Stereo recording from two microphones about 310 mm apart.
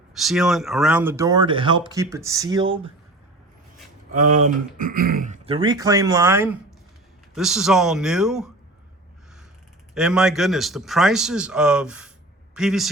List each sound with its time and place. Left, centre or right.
0.1 s speech: centre
4.4 s speech: right; by 8.4 s centre
9.9 s speech: centre